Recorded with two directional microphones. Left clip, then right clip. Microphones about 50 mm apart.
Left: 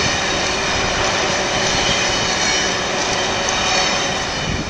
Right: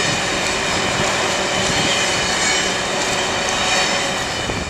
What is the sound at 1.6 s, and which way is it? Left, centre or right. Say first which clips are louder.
Train: even; right.